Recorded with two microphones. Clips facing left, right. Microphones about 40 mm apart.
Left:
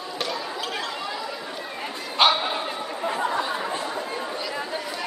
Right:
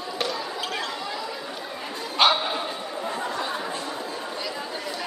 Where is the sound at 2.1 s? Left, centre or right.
Centre.